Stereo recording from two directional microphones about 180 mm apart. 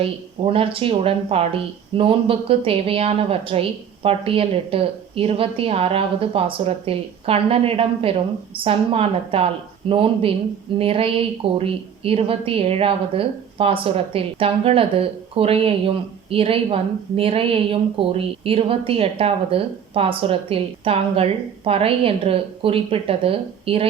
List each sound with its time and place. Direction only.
0.0 s a woman's voice: 30° right (ahead or behind)